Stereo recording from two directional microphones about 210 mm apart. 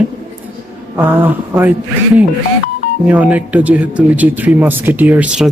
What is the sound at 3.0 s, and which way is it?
Speech, 5° right (ahead or behind).